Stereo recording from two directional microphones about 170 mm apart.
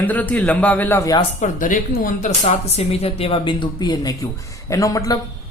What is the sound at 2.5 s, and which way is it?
Speech, 35° left (ahead or behind).